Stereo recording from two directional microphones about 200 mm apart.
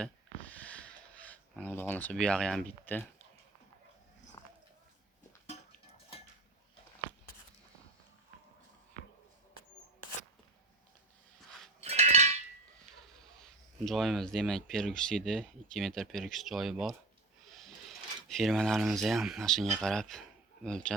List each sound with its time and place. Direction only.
0.0 s a sound: 5° left (ahead or behind)
1.3 s speech: 10° left (ahead or behind)
11.8 s chink: 35° right (ahead or behind)
13.1 s speech: centre (ahead or behind)